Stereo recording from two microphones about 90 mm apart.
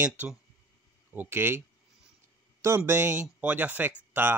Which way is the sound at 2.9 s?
30° right (ahead or behind).